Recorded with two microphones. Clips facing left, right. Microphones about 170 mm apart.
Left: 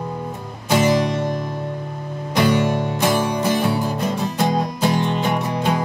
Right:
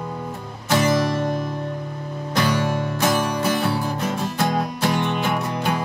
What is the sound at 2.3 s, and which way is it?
Music, 25° left (ahead or behind).